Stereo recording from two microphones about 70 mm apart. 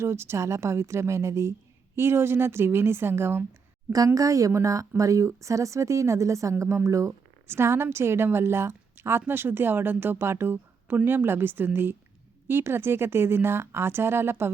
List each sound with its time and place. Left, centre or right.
0.0 s speech: right
3.9 s speech: right